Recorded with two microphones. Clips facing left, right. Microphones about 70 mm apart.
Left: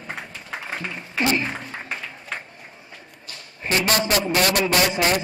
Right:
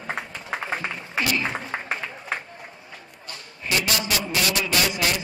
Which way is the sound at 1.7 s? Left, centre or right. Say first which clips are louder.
Right 3 dB; right.